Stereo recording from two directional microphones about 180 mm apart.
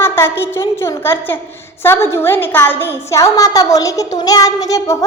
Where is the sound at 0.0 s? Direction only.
10° left (ahead or behind).